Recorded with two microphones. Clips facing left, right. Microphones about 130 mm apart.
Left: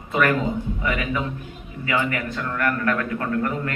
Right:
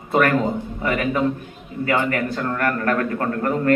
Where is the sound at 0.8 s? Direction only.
45° right (ahead or behind).